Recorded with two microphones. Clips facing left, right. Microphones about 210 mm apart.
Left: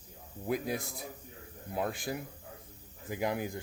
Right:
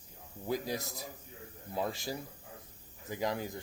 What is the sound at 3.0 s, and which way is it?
Speech, 10° left (ahead or behind).